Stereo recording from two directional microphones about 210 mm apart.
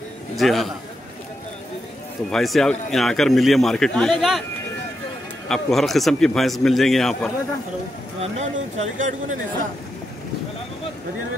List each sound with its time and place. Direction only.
0.4 s a man's voice: centre (ahead or behind)
2.3 s a man's voice: centre (ahead or behind)
5.5 s a man's voice: centre (ahead or behind)
8.2 s speech: 30° right (ahead or behind)